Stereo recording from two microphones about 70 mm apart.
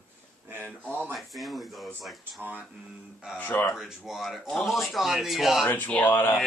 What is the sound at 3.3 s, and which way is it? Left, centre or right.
Speech, left.